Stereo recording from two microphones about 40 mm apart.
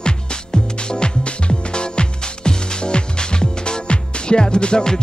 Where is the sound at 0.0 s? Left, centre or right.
Left.